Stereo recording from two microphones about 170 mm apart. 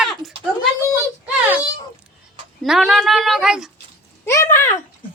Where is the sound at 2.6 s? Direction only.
Centre (ahead or behind).